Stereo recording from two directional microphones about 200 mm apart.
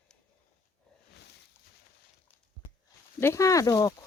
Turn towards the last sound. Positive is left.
turn(degrees=15)  # may be behind; listen again after turning